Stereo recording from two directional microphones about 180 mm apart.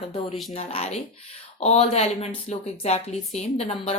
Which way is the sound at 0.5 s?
35° left (ahead or behind).